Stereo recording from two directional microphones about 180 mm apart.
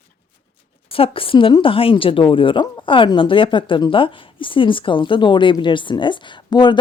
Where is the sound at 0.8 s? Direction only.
30° left (ahead or behind).